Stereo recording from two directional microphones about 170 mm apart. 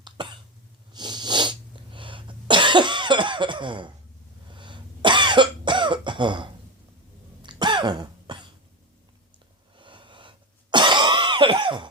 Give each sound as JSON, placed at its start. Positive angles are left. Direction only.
{"t": 0.0, "sound": "cough", "side_deg": -30}
{"t": 7.4, "sound": "throat clearing", "side_deg": -25}
{"t": 9.7, "sound": "cough", "side_deg": -30}